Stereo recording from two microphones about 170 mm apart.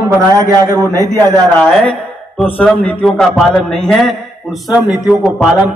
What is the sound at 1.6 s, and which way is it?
A man's voice, 10° left (ahead or behind).